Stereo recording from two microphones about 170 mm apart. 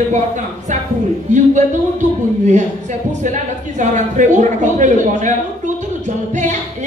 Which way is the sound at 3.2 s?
45° right (ahead or behind).